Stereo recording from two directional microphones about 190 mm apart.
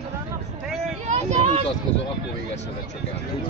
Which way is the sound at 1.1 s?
35° right (ahead or behind).